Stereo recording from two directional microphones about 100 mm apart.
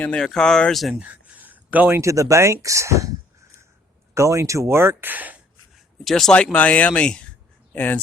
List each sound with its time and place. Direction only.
0.0 s speech: 10° left (ahead or behind)
1.0 s a sound: 15° right (ahead or behind)
2.0 s speech: 30° right (ahead or behind)
4.1 s speech: 30° right (ahead or behind)
6.1 s speech: 5° left (ahead or behind)